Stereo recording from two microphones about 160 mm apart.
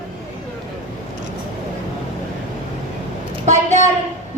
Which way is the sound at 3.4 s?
45° right (ahead or behind).